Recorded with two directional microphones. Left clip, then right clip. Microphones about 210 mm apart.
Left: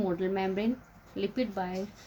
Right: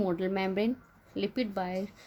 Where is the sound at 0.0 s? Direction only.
50° right (ahead or behind).